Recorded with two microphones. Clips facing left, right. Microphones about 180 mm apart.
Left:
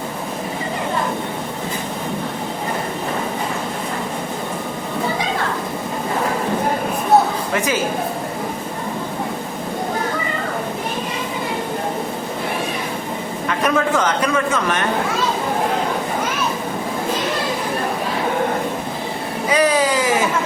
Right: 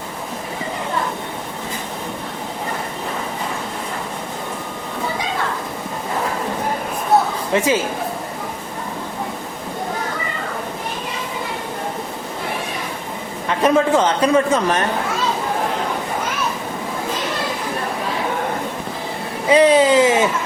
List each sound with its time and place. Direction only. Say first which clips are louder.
7.5 s a man's voice: right 5 dB; 25° right (ahead or behind)
13.6 s a man's voice: right 4 dB; 25° right (ahead or behind)
19.5 s a sound: right 5 dB; 25° right (ahead or behind)